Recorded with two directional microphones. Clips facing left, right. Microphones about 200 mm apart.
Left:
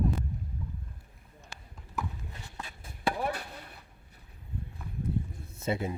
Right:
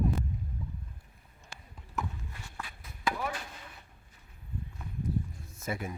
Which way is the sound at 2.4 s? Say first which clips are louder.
Even; 20° left (ahead or behind).